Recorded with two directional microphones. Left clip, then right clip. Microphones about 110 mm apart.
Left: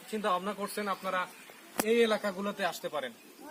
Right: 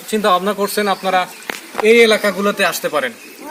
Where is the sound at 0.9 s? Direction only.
30° right (ahead or behind).